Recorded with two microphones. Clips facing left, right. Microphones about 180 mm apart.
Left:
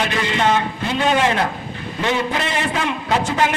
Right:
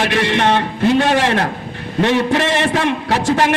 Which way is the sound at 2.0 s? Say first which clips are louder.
Right 6 dB; 75° right (ahead or behind).